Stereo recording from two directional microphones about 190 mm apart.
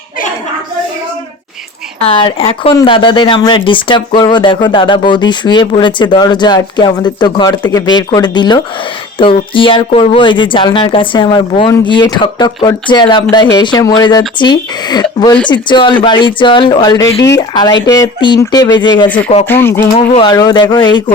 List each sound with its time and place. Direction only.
2.0 s speech: 30° left (ahead or behind)
19.0 s speech: 10° left (ahead or behind)